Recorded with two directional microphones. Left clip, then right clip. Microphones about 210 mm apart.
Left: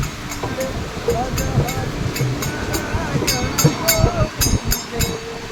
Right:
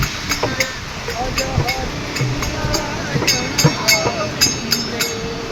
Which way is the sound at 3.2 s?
50° left (ahead or behind).